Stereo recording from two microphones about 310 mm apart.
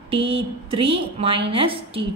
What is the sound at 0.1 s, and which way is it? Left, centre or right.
A woman's voice, centre.